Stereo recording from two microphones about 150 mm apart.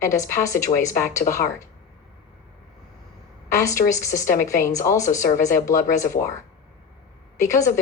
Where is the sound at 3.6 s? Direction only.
20° left (ahead or behind).